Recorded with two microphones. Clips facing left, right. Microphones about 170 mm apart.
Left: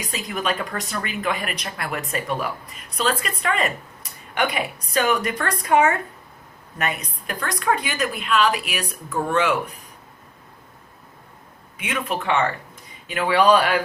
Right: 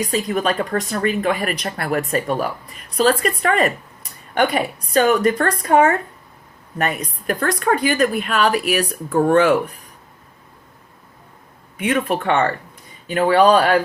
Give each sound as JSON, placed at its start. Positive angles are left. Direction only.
{"t": 0.1, "sound": "a woman's voice", "side_deg": -35}
{"t": 11.8, "sound": "speech", "side_deg": -40}